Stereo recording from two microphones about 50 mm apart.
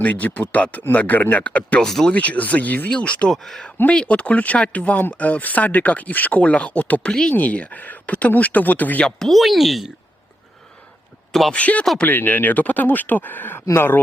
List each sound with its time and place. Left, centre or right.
0.0 s speech: left
1.8 s speech: centre
2.1 s speech: left
3.2 s speech: centre
3.9 s speech: left
7.1 s speech: centre
7.3 s speech: left
9.0 s speech: centre
11.3 s speech: centre
11.5 s speech: left